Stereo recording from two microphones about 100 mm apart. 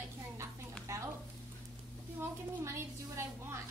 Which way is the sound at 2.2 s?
25° right (ahead or behind).